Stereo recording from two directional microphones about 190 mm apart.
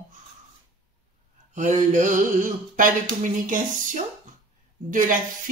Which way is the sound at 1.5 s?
40° right (ahead or behind).